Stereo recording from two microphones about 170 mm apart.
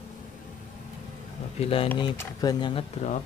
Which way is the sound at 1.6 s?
35° left (ahead or behind).